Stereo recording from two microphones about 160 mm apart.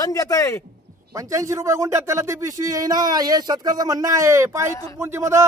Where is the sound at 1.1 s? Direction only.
20° right (ahead or behind).